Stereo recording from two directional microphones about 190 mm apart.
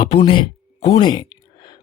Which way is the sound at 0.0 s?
25° left (ahead or behind).